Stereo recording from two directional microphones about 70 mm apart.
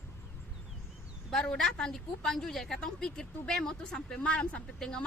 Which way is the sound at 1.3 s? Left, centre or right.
Centre.